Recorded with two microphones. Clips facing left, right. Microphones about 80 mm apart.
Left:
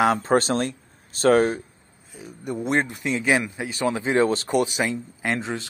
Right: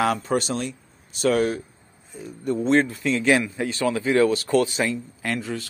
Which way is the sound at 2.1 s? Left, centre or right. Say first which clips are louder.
Right 4 dB; centre.